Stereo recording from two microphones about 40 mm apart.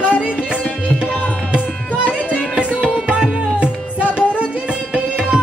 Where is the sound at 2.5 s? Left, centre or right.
Right.